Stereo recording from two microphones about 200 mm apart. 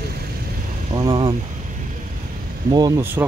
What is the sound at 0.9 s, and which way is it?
Vehicle, 25° right (ahead or behind).